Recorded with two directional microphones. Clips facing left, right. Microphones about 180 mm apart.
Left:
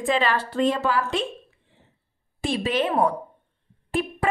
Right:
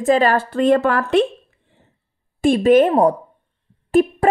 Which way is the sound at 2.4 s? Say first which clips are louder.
Right 12 dB; 50° right (ahead or behind).